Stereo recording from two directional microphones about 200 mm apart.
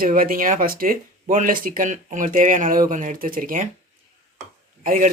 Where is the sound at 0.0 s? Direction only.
45° right (ahead or behind).